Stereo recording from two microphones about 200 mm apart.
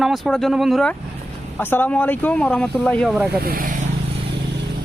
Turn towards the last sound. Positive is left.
turn(degrees=-45)  # may be behind; listen again after turning